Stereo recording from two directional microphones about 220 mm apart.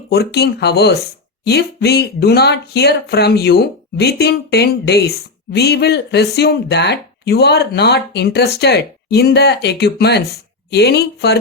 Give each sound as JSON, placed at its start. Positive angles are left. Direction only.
{"t": 0.1, "sound": "speech", "side_deg": 45}